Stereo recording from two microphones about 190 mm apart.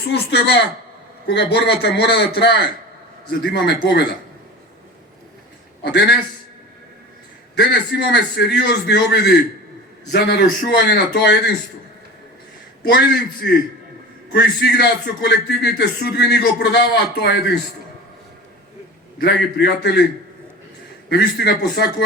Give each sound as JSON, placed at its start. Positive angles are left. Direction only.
{"t": 0.0, "sound": "a man's voice", "side_deg": 60}
{"t": 5.8, "sound": "a man's voice", "side_deg": 65}
{"t": 7.5, "sound": "a man's voice", "side_deg": 65}
{"t": 12.8, "sound": "a man's voice", "side_deg": 60}
{"t": 19.2, "sound": "a man's voice", "side_deg": 60}
{"t": 21.1, "sound": "a man's voice", "side_deg": 60}